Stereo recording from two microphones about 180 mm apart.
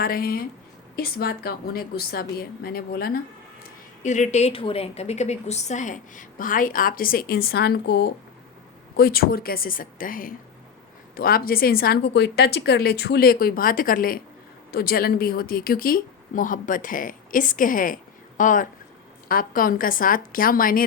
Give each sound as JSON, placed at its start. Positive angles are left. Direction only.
{"t": 0.0, "sound": "a woman's voice", "side_deg": 55}
{"t": 4.0, "sound": "a woman's voice", "side_deg": 40}